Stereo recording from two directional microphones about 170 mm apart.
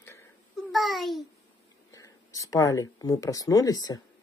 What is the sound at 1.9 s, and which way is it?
Speech, 20° left (ahead or behind).